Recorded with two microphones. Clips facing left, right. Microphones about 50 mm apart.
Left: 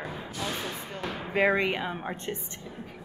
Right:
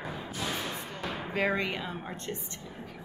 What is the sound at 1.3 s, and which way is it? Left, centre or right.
A woman's voice, left.